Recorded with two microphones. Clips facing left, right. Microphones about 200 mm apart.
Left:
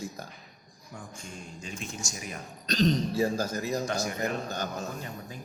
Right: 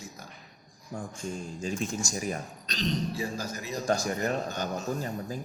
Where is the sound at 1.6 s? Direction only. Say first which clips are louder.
Right 8 dB; 40° right (ahead or behind).